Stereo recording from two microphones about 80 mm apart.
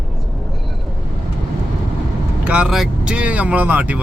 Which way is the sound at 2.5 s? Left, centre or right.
Centre.